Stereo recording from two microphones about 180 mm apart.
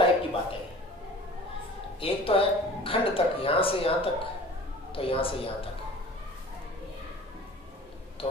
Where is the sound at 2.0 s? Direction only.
30° left (ahead or behind).